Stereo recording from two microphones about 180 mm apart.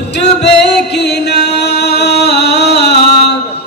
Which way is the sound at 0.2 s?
70° left (ahead or behind).